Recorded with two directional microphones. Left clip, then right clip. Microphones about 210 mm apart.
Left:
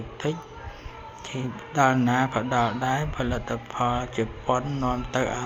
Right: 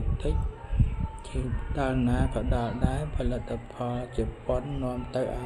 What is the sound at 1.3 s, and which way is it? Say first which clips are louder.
A man's voice: left 9 dB; 20° left (ahead or behind).